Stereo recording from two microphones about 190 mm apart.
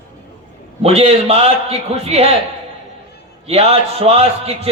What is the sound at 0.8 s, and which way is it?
A man's voice, 30° right (ahead or behind).